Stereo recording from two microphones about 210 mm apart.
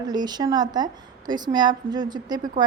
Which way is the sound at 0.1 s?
20° right (ahead or behind).